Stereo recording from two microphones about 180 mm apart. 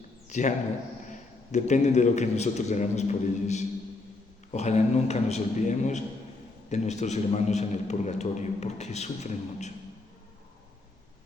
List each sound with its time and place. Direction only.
0.3 s a man's voice: 40° left (ahead or behind)